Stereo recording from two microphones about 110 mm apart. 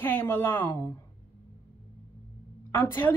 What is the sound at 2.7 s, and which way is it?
Speech, 20° left (ahead or behind).